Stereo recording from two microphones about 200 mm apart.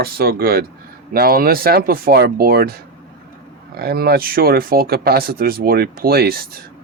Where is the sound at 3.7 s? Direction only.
50° right (ahead or behind).